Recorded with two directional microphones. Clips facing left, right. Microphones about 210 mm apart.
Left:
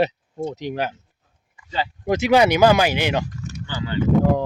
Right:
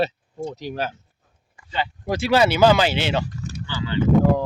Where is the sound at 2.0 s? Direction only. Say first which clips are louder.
Left 3 dB; 15° left (ahead or behind).